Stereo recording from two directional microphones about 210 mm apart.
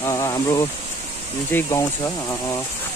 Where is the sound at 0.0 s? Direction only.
15° left (ahead or behind).